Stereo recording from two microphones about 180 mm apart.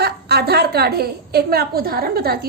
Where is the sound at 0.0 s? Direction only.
65° right (ahead or behind).